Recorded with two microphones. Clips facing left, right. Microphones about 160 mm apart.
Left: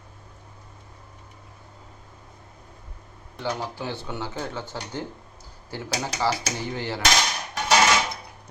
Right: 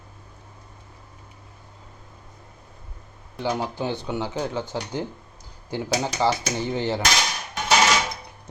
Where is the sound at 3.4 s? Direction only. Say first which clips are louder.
Right 4 dB; 20° right (ahead or behind).